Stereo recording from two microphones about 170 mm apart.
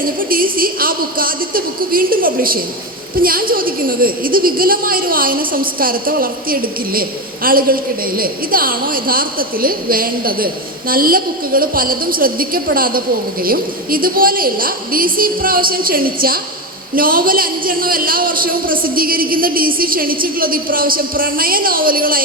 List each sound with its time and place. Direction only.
0.2 s a woman's voice: 60° right (ahead or behind)